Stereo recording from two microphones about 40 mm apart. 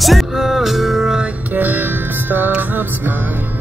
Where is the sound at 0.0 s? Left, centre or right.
Centre.